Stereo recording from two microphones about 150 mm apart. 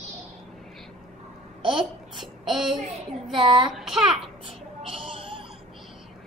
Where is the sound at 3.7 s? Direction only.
5° right (ahead or behind).